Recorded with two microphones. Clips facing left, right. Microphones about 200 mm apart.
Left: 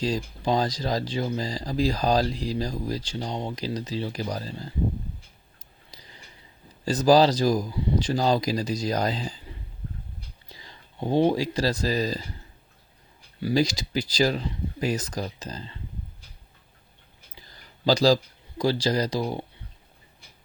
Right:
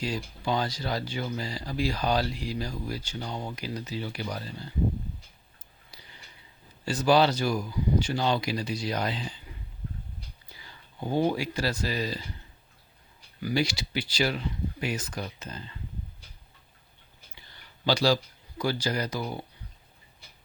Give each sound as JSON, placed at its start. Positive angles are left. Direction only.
{"t": 0.0, "sound": "speech", "side_deg": 35}
{"t": 5.9, "sound": "a sound", "side_deg": 35}
{"t": 6.8, "sound": "speech", "side_deg": 35}
{"t": 10.5, "sound": "speech", "side_deg": 35}
{"t": 13.4, "sound": "speech", "side_deg": 35}
{"t": 17.3, "sound": "a sound", "side_deg": 40}